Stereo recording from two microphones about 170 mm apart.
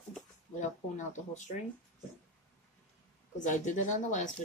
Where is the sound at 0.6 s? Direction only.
45° left (ahead or behind).